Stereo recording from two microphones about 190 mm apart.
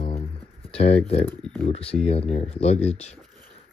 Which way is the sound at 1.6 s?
30° left (ahead or behind).